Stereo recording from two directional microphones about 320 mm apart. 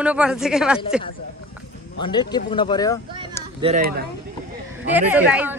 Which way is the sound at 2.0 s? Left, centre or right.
Centre.